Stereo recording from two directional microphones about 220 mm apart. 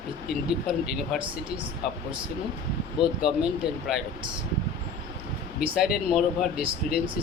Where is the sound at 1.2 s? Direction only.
25° right (ahead or behind).